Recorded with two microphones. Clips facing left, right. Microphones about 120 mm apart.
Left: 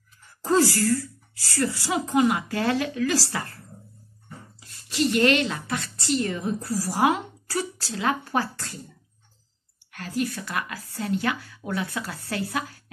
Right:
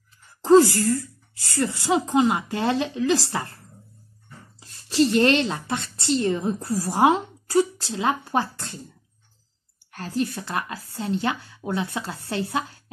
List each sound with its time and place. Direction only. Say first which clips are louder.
0.4 s speech: right 6 dB; 25° right (ahead or behind)
4.6 s speech: right 6 dB; 30° right (ahead or behind)
9.9 s speech: right 2 dB; 30° right (ahead or behind)